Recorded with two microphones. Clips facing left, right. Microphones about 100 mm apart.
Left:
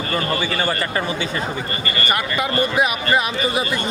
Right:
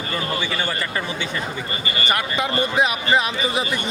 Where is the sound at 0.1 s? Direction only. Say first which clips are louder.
Left 3 dB; 45° left (ahead or behind).